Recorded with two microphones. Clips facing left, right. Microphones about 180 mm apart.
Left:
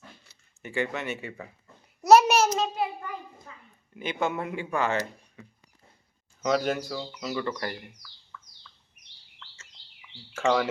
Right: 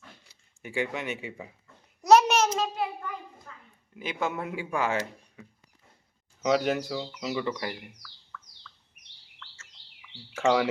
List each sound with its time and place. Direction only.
0.3 s speech: 10° right (ahead or behind)
2.0 s a child's voice: 5° left (ahead or behind)
6.4 s speech: 15° right (ahead or behind)
8.0 s bird: 20° left (ahead or behind)